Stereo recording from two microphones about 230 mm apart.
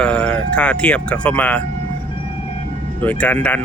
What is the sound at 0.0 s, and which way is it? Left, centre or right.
Speech, centre.